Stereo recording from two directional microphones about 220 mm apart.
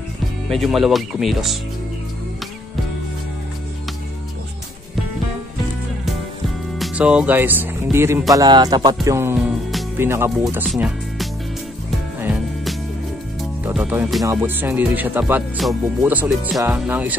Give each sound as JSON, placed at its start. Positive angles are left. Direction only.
{"t": 0.5, "sound": "speech", "side_deg": 0}
{"t": 6.8, "sound": "speech", "side_deg": -5}
{"t": 9.0, "sound": "music", "side_deg": -10}
{"t": 9.9, "sound": "speech", "side_deg": -10}
{"t": 12.2, "sound": "music", "side_deg": -5}
{"t": 13.7, "sound": "speech", "side_deg": -10}